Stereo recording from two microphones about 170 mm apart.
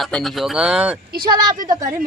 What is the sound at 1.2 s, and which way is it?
Speech, 25° right (ahead or behind).